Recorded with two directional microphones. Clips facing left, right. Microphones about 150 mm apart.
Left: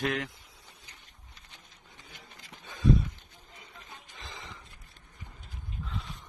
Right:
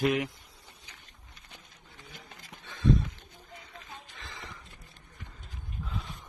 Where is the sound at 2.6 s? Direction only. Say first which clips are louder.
Left 1 dB; 15° left (ahead or behind).